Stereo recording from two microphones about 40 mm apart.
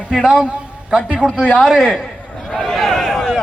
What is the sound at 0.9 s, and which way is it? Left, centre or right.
Speech, right.